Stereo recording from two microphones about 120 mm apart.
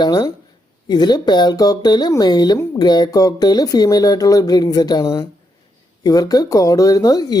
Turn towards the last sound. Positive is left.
turn(degrees=30)  # may be behind; listen again after turning